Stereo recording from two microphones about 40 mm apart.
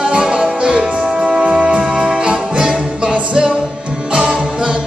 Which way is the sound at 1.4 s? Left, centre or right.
Right.